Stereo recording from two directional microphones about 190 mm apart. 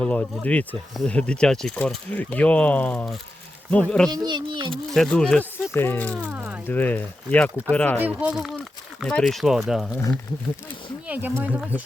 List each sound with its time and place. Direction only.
0.0 s speech: 5° left (ahead or behind)
4.1 s speech: 20° right (ahead or behind)
4.7 s speech: 5° left (ahead or behind)
6.3 s speech: 10° right (ahead or behind)
6.7 s speech: 10° left (ahead or behind)
7.9 s speech: 10° right (ahead or behind)
11.1 s speech: 10° right (ahead or behind)